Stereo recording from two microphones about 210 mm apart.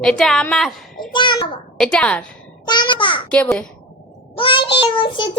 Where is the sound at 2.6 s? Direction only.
20° left (ahead or behind).